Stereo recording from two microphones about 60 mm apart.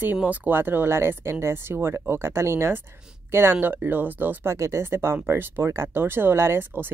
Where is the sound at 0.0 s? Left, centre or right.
Right.